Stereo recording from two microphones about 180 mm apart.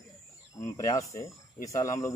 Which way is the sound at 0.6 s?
20° left (ahead or behind).